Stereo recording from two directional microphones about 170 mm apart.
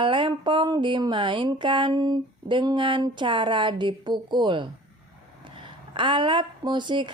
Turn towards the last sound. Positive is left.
turn(degrees=-25)  # may be behind; listen again after turning